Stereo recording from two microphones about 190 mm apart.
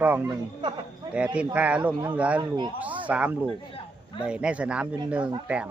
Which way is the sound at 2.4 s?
20° right (ahead or behind).